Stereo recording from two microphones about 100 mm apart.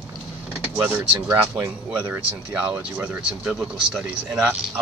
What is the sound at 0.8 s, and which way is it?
Speech, 20° right (ahead or behind).